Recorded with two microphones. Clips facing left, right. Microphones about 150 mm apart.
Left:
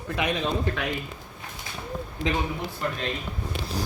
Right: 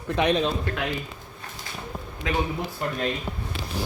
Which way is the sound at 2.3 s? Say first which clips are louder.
Right 1 dB; 20° left (ahead or behind).